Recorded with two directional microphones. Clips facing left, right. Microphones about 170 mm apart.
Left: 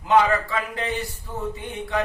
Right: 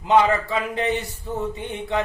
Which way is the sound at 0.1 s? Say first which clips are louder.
Right 1 dB; 20° right (ahead or behind).